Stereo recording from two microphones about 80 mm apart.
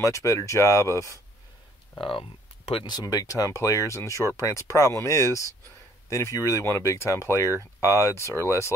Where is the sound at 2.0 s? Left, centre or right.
Left.